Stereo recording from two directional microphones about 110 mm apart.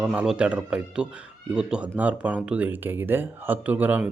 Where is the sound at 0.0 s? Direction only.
10° right (ahead or behind).